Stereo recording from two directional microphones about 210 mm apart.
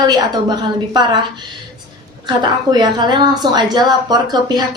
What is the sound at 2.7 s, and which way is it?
A woman's voice, 20° right (ahead or behind).